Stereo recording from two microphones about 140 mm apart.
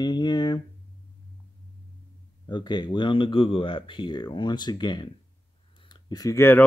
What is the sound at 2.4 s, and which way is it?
Speech, 30° left (ahead or behind).